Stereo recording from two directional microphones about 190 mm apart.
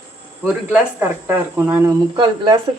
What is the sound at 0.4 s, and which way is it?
Speech, 10° right (ahead or behind).